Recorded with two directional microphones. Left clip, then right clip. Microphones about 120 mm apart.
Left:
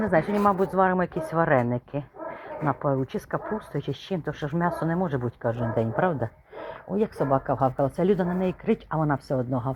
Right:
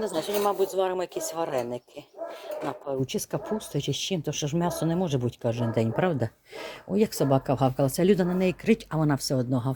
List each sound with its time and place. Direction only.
0.4 s speech: 30° right (ahead or behind); by 9.7 s 50° right (ahead or behind)